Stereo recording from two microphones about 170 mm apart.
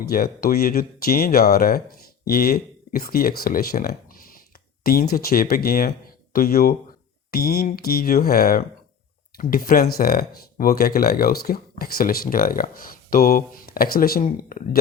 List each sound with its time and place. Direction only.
0.0 s speech: 60° left (ahead or behind)